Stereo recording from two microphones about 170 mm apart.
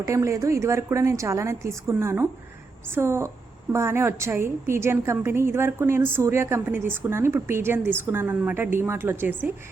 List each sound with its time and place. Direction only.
0.0 s a woman's voice: 15° right (ahead or behind)